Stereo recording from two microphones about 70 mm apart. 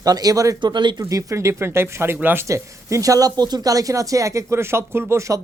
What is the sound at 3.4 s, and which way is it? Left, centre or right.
A woman's voice, right.